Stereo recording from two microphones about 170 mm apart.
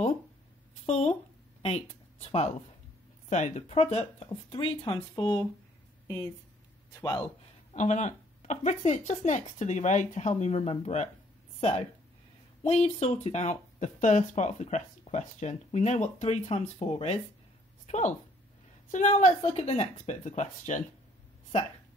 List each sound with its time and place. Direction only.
0.8 s speech: 40° left (ahead or behind); by 6.3 s 20° left (ahead or behind)
7.7 s speech: 45° left (ahead or behind)
12.6 s speech: 40° left (ahead or behind)